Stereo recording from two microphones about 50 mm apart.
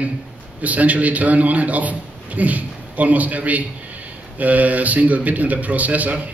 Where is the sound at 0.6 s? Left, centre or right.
Right.